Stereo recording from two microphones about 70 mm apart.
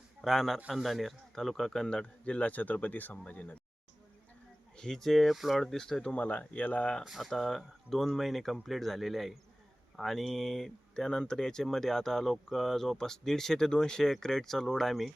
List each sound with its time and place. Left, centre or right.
0.2 s a man's voice: centre; by 3.6 s left
4.8 s speech: centre
7.0 s speech: centre